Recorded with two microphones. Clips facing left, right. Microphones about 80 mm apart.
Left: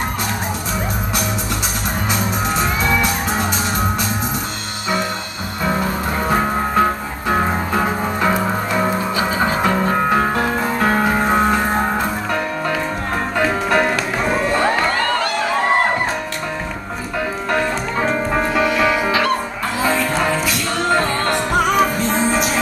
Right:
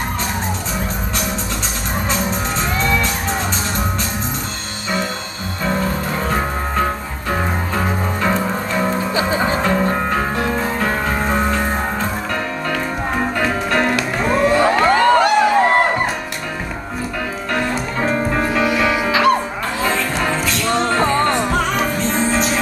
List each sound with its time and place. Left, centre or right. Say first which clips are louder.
2.0 s music: left 1 dB; centre
7.2 s music: left 3 dB; centre
13.4 s music: left 4 dB; centre
15.0 s a sound: right 7 dB; centre
17.5 s music: even; centre
19.8 s music: left 2 dB; centre